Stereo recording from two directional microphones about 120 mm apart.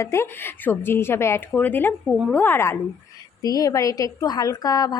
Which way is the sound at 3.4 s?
30° left (ahead or behind).